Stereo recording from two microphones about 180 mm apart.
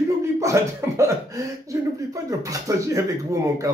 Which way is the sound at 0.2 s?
15° right (ahead or behind).